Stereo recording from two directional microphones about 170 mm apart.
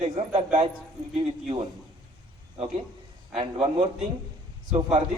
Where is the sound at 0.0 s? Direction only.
40° right (ahead or behind).